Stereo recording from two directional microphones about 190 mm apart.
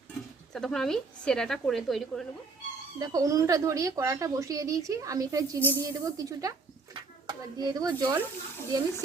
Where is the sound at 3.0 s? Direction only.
20° right (ahead or behind).